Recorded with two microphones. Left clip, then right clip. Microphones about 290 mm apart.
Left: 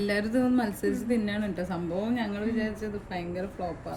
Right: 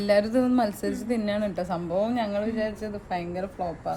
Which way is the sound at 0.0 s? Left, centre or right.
Centre.